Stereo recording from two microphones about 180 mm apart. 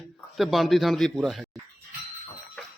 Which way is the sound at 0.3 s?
Centre (ahead or behind).